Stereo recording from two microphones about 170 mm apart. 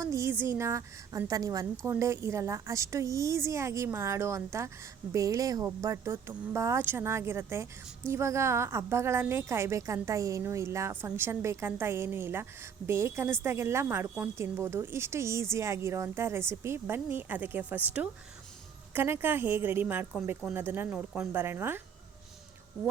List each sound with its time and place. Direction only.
0.0 s speech: 15° right (ahead or behind)